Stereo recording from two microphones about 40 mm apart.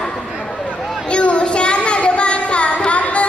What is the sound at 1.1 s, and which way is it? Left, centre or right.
Child singing, left.